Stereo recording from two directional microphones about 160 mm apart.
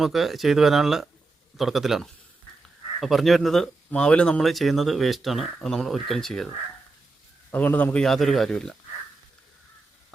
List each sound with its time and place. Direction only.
0.0 s speech: centre (ahead or behind)
7.5 s speech: 10° left (ahead or behind)